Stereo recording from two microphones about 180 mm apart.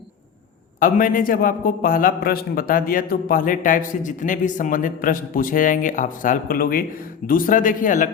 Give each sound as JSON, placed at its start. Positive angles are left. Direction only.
{"t": 0.8, "sound": "a man's voice", "side_deg": 50}